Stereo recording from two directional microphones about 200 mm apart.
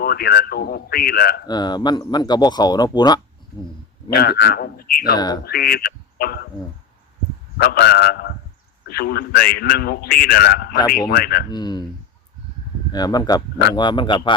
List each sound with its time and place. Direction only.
0.0 s a man's voice: 50° left (ahead or behind)
1.5 s speech: 20° left (ahead or behind)
4.1 s a man's voice: 50° left (ahead or behind)
5.1 s speech: 20° left (ahead or behind)
5.5 s a man's voice: 50° left (ahead or behind)
7.6 s a man's voice: 50° left (ahead or behind)
11.5 s speech: 20° left (ahead or behind)
12.9 s speech: 20° left (ahead or behind)